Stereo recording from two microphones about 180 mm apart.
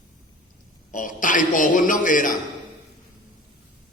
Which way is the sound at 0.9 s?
45° left (ahead or behind).